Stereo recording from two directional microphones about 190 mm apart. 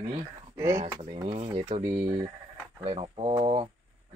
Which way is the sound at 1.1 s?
30° right (ahead or behind).